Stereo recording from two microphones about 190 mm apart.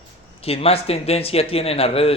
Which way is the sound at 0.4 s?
30° left (ahead or behind).